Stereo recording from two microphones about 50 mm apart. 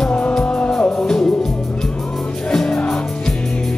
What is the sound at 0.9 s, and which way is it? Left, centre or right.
Music, centre.